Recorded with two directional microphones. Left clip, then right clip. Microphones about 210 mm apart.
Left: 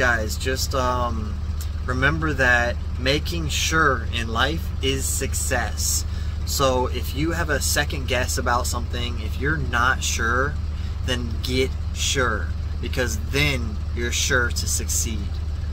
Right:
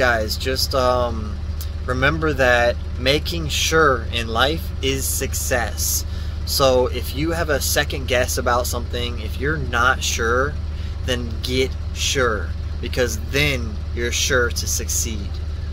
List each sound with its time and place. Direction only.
0.0 s speech: 15° left (ahead or behind)